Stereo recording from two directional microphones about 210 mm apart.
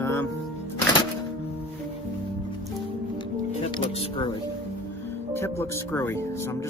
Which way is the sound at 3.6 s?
25° left (ahead or behind).